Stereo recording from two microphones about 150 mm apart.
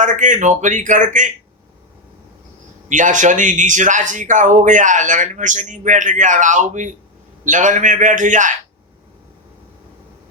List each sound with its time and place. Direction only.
0.0 s speech: 55° right (ahead or behind)
2.9 s speech: 55° right (ahead or behind)